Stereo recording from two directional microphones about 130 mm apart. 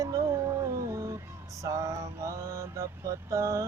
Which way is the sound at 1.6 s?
25° right (ahead or behind).